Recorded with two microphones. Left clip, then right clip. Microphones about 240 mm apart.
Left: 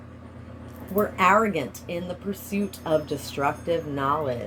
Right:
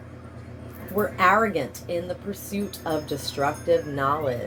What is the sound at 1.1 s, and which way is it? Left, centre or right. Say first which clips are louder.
Speech: right 1 dB; left.